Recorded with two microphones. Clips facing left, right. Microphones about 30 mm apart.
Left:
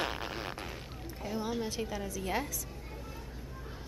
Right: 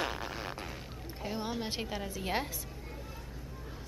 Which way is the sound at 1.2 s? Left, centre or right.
Right.